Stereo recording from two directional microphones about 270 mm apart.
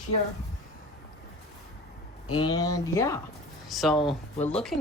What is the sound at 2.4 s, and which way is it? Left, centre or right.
Speech, centre.